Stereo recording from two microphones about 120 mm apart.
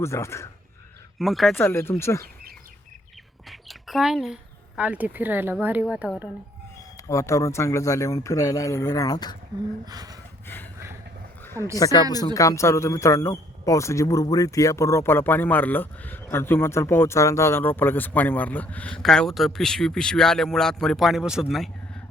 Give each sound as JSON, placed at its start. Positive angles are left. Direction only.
{"t": 0.0, "sound": "speech", "side_deg": 25}
{"t": 1.2, "sound": "speech", "side_deg": 0}
{"t": 1.5, "sound": "speech", "side_deg": 20}
{"t": 3.5, "sound": "mouse", "side_deg": 0}
{"t": 4.8, "sound": "speech", "side_deg": -10}
{"t": 6.9, "sound": "speech", "side_deg": 25}
{"t": 9.8, "sound": "a sound", "side_deg": -35}
{"t": 10.4, "sound": "a sound", "side_deg": 15}
{"t": 11.4, "sound": "speech", "side_deg": 25}
{"t": 21.5, "sound": "a sound", "side_deg": 0}